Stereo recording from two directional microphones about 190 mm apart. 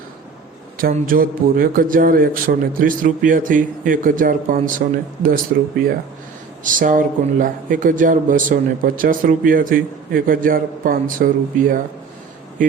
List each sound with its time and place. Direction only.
0.8 s speech: 50° right (ahead or behind)
6.7 s speech: 45° right (ahead or behind)